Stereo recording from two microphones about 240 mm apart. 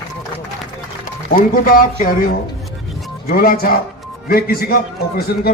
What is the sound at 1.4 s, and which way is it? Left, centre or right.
A man's voice, left.